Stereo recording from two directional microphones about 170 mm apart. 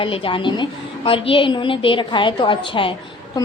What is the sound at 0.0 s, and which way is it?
A woman's voice, 30° left (ahead or behind).